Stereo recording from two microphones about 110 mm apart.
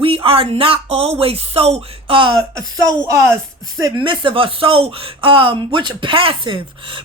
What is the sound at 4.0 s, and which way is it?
Speech, 50° right (ahead or behind).